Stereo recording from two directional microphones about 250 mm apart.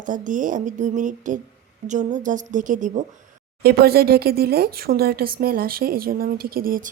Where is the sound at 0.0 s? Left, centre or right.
Right.